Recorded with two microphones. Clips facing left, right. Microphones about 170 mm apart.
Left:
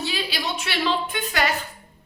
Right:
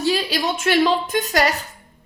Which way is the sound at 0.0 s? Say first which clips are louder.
Right 7 dB; 45° right (ahead or behind).